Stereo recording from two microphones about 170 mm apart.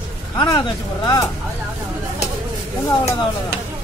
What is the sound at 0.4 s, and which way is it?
Speech, 25° left (ahead or behind).